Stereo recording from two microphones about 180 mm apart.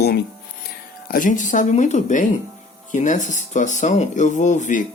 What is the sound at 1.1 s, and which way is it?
Speech, 45° left (ahead or behind).